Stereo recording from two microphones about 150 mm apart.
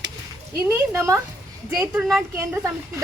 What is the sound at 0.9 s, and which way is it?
Speech, 20° right (ahead or behind).